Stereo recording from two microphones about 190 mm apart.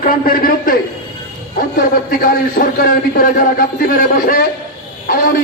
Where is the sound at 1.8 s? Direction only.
50° left (ahead or behind).